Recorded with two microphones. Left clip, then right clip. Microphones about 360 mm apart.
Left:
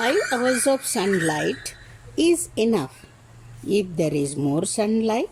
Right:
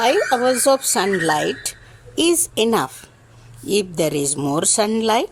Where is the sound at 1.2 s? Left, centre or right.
Right.